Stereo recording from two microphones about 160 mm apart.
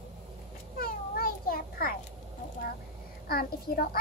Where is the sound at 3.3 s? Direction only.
70° left (ahead or behind).